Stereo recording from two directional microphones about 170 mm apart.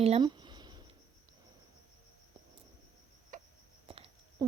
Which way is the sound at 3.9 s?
35° right (ahead or behind).